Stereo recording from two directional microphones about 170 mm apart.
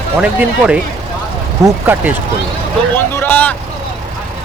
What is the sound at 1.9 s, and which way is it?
Speech, 10° right (ahead or behind).